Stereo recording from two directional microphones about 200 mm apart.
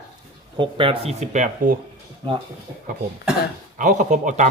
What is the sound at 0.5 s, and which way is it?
Speech, 25° right (ahead or behind).